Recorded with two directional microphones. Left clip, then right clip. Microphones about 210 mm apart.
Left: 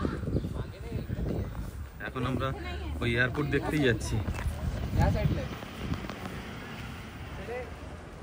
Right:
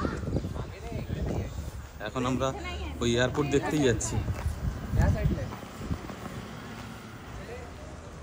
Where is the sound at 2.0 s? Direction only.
10° right (ahead or behind).